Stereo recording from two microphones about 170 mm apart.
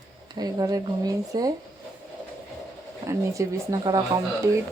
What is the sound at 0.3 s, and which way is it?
Speech, 20° right (ahead or behind).